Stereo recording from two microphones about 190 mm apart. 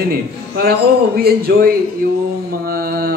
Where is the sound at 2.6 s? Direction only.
50° right (ahead or behind).